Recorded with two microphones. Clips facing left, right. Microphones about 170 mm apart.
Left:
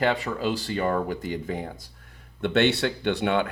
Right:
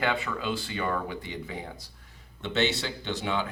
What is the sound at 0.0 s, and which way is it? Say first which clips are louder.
Speech: left 5 dB; 40° left (ahead or behind).